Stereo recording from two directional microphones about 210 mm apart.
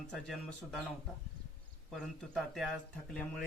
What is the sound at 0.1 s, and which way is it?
Speech, centre (ahead or behind).